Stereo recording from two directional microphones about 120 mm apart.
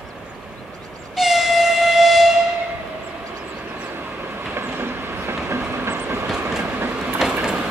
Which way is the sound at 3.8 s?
15° right (ahead or behind).